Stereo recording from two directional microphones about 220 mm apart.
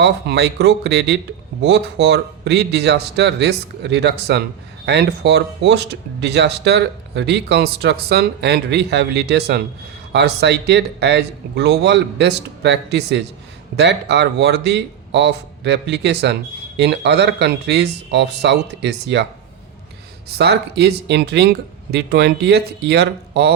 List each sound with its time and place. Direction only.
0.0 s a man's voice: 50° right (ahead or behind)
20.4 s a man's voice: 50° right (ahead or behind)